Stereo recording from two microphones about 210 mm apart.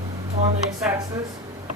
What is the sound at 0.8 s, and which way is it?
Speech, 5° right (ahead or behind).